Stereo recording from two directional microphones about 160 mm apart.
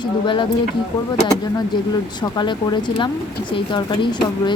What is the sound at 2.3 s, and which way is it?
A woman's voice, 30° left (ahead or behind).